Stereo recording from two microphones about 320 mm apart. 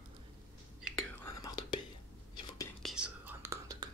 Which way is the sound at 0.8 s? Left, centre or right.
Centre.